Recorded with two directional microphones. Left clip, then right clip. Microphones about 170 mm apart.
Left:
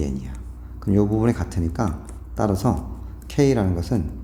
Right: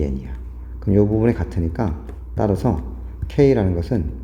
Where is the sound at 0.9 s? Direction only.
15° right (ahead or behind).